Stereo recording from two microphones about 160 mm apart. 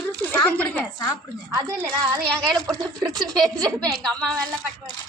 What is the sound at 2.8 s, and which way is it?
Speech, 25° right (ahead or behind).